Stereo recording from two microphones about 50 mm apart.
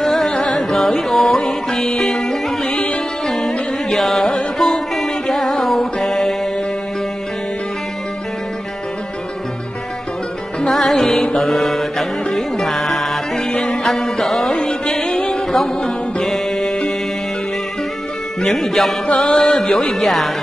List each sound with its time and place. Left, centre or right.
0.0 s carnatic music: centre
1.4 s music: centre
3.3 s music: centre
10.6 s music: centre
11.3 s mantra: centre
12.4 s music: centre
14.5 s music: centre
16.2 s music: centre
18.5 s music: centre
19.0 s music: left; by 20.2 s centre